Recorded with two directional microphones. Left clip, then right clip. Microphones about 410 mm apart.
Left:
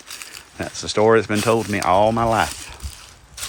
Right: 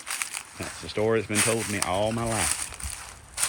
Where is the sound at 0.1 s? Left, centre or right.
Centre.